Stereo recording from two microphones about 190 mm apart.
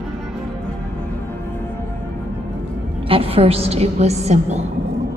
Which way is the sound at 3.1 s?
30° right (ahead or behind).